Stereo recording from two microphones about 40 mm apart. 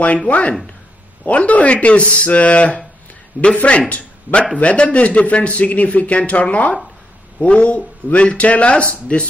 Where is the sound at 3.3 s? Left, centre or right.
Right.